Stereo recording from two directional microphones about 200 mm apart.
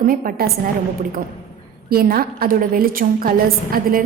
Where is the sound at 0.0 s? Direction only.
45° right (ahead or behind).